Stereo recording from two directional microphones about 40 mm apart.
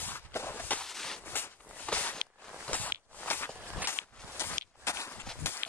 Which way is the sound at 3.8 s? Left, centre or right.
Left.